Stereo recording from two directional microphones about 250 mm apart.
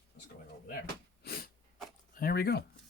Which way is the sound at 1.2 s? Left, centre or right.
Left.